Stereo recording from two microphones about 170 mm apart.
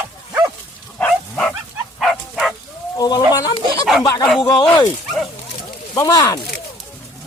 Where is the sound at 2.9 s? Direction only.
25° left (ahead or behind).